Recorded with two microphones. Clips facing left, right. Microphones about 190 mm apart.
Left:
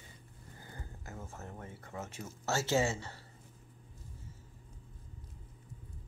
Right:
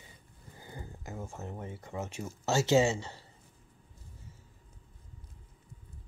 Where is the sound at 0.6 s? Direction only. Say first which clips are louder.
Right 5 dB; 15° right (ahead or behind).